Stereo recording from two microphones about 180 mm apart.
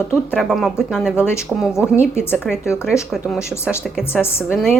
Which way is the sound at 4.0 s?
15° left (ahead or behind).